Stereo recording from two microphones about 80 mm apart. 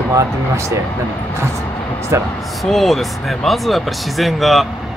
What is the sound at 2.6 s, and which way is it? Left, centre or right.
Speech, centre.